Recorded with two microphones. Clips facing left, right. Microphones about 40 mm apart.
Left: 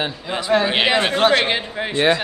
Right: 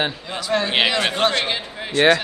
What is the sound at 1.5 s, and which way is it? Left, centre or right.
Speech, left.